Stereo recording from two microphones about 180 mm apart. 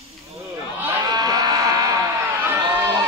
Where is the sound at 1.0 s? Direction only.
20° right (ahead or behind).